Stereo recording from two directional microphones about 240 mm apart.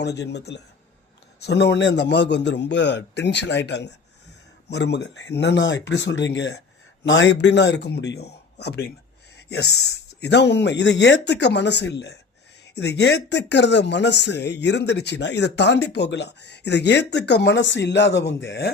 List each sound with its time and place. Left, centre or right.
0.0 s speech: left